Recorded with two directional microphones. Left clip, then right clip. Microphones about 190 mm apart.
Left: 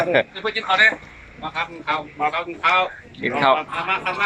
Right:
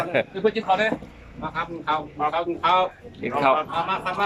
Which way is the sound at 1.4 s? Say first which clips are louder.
Left 2 dB; 10° right (ahead or behind).